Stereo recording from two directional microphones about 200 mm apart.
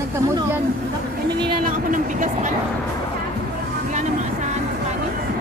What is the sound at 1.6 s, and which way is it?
Speech, 40° right (ahead or behind).